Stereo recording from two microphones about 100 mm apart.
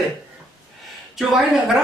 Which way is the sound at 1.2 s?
Centre (ahead or behind).